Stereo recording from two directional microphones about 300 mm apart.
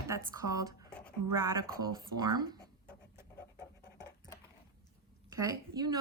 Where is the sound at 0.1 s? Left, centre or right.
Centre.